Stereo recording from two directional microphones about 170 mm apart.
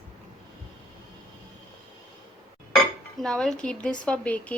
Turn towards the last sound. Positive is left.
turn(degrees=10)  # may be behind; listen again after turning